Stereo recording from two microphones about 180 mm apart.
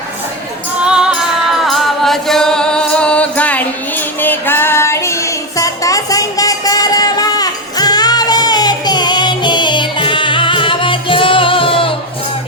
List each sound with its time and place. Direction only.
0.9 s music: 5° right (ahead or behind); by 11.9 s 30° left (ahead or behind)